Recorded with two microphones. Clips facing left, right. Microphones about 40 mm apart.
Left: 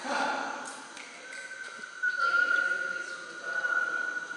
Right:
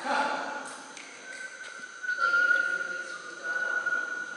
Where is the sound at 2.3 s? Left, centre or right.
Centre.